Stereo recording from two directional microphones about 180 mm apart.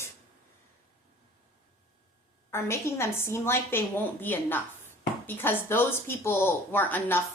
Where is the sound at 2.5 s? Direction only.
15° left (ahead or behind).